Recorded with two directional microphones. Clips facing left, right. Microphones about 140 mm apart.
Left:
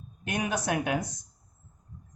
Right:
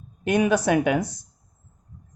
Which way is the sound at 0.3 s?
90° right.